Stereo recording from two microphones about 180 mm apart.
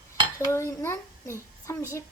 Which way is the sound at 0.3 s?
15° left (ahead or behind).